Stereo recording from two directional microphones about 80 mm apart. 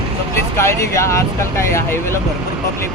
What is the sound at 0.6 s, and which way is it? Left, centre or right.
Speech, left.